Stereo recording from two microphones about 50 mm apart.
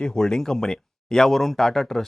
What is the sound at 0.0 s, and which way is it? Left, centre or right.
Speech, centre.